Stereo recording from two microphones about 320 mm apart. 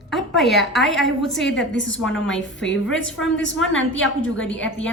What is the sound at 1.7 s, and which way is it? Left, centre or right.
Speech, left.